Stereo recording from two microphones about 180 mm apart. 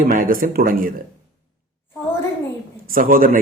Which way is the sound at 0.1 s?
50° right (ahead or behind).